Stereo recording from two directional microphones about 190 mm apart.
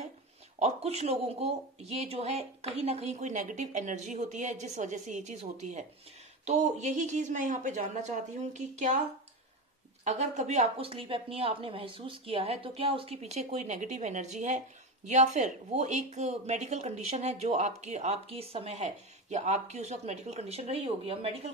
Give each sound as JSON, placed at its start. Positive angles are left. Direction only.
{"t": 0.6, "sound": "speech", "side_deg": -35}
{"t": 10.0, "sound": "speech", "side_deg": -35}